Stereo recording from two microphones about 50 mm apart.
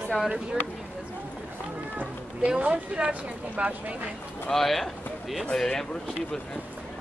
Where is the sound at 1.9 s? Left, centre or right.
Right.